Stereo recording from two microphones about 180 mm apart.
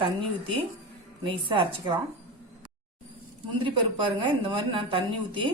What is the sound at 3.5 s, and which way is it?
A woman's voice, 30° right (ahead or behind).